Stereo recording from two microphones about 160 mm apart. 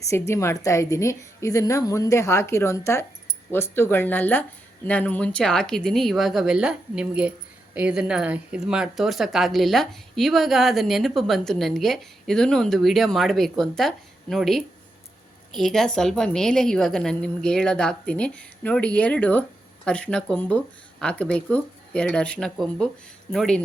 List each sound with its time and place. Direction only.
0.0 s a woman's voice: 20° left (ahead or behind); by 23.6 s centre (ahead or behind)